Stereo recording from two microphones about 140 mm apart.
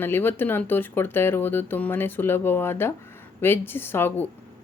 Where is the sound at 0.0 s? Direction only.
15° left (ahead or behind).